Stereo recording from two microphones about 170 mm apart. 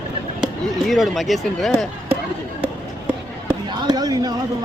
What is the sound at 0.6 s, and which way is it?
Speech, centre (ahead or behind).